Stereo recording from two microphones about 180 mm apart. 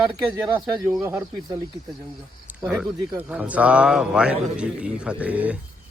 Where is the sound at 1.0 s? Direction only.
15° right (ahead or behind).